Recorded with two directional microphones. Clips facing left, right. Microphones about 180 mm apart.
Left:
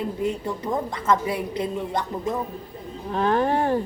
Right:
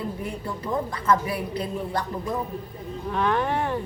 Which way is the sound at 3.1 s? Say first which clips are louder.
Left 3 dB; 35° left (ahead or behind).